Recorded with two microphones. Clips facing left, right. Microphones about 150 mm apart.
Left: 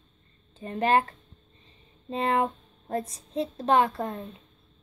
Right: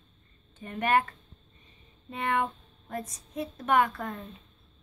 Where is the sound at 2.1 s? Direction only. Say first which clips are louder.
Left 4 dB; 30° left (ahead or behind).